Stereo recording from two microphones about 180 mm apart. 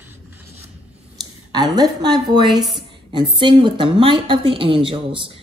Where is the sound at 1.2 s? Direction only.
20° right (ahead or behind).